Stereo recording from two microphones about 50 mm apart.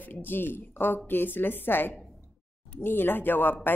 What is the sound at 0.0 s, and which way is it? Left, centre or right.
A woman's voice, left.